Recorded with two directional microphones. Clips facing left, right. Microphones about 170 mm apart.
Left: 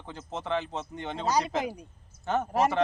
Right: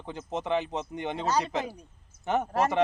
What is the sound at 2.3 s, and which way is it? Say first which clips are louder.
Speech: right 1 dB; 15° right (ahead or behind).